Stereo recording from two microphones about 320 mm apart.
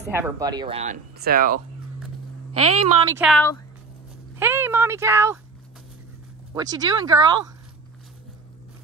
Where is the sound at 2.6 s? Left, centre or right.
Centre.